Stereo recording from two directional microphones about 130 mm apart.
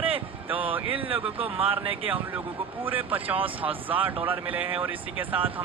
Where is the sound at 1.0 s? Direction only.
45° right (ahead or behind).